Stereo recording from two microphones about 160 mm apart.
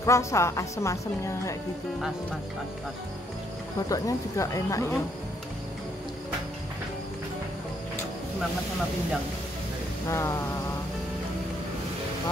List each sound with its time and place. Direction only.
0.0 s a woman's voice: 20° left (ahead or behind)
3.9 s a woman's voice: 20° left (ahead or behind)
10.0 s a sound: 15° left (ahead or behind)